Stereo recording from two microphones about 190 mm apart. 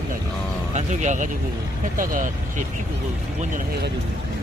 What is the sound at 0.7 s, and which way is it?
Speech, 40° right (ahead or behind).